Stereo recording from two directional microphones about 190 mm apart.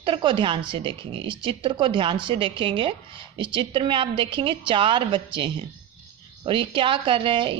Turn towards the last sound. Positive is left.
turn(degrees=-25)  # may be behind; listen again after turning